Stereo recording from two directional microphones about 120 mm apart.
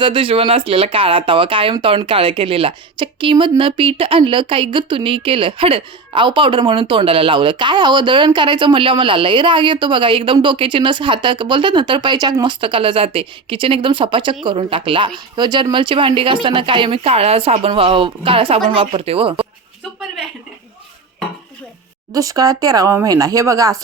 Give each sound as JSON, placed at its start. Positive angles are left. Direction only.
{"t": 0.0, "sound": "speech", "side_deg": -45}
{"t": 22.1, "sound": "speech", "side_deg": -30}